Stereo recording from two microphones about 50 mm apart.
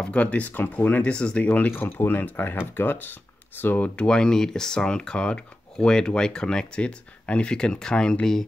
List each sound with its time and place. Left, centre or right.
0.0 s speech: left
1.7 s speech: left
3.9 s speech: centre